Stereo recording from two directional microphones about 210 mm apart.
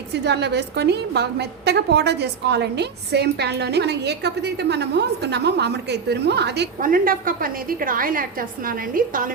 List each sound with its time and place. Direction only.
0.1 s a woman's voice: 55° right (ahead or behind)